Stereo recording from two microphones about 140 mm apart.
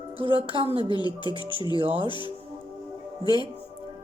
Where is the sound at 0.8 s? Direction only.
30° left (ahead or behind).